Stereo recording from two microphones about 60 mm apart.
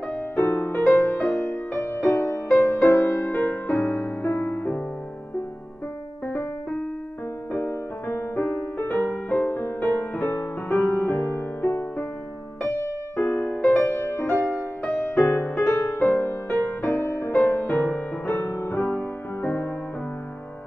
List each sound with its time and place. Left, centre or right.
0.7 s music: left
2.2 s music: left
3.3 s music: left
4.5 s music: left
7.5 s music: left
15.0 s music: left
15.6 s music: left